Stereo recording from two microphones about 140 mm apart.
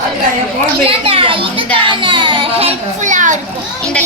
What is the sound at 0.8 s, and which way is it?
A child's voice, 40° right (ahead or behind).